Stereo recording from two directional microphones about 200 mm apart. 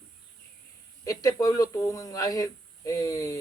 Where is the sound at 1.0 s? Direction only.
15° left (ahead or behind).